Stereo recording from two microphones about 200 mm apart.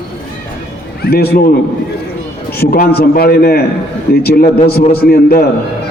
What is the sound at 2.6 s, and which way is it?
A man's voice, 50° left (ahead or behind).